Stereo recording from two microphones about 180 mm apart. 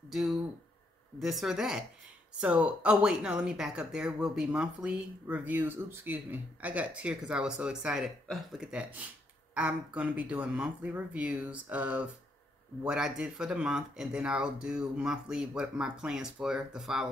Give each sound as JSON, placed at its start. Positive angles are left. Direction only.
{"t": 0.1, "sound": "speech", "side_deg": 0}